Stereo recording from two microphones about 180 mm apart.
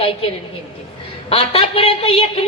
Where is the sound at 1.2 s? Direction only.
30° left (ahead or behind).